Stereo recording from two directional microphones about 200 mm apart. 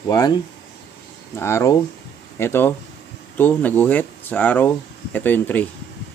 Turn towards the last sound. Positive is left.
turn(degrees=10)  # may be behind; listen again after turning